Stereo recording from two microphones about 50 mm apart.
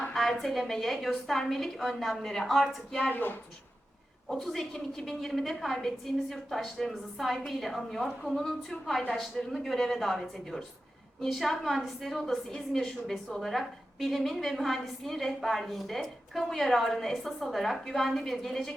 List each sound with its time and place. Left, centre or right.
0.1 s a woman's voice: centre
3.1 s a woman's voice: left
4.3 s a woman's voice: centre